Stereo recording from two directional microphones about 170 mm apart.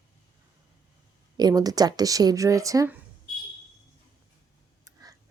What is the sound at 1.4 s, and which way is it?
Speech, 20° right (ahead or behind).